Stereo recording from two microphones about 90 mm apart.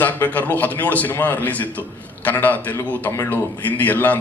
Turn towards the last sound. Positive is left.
turn(degrees=20)  # may be behind; listen again after turning